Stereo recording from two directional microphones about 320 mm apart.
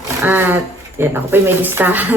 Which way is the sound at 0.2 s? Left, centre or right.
Centre.